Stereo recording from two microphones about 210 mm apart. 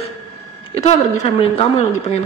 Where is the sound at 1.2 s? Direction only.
30° left (ahead or behind).